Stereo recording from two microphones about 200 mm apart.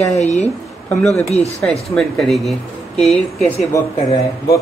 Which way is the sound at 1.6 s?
Centre (ahead or behind).